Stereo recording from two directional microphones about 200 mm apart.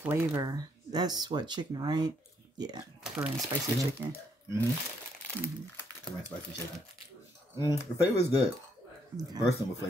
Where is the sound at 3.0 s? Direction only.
5° right (ahead or behind).